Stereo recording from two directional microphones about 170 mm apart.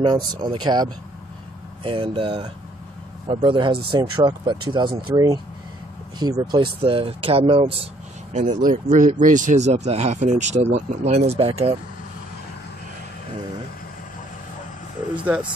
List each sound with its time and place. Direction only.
0.0 s speech: 25° right (ahead or behind)
8.3 s speech: 45° right (ahead or behind)
15.1 s vehicle: 10° right (ahead or behind)